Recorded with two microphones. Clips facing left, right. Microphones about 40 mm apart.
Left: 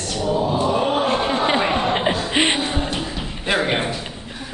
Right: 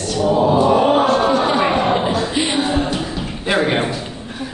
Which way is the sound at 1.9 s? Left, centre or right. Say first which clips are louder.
Right 2 dB; left.